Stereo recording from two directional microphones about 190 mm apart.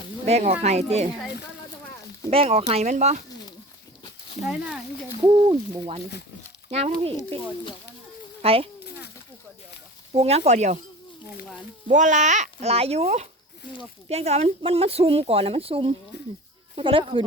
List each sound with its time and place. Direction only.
0.3 s speech: 35° right (ahead or behind)
2.3 s speech: 30° right (ahead or behind)
5.2 s speech: 20° right (ahead or behind)
8.4 s speech: 30° right (ahead or behind)
10.1 s speech: 30° right (ahead or behind)
11.9 s speech: 40° right (ahead or behind)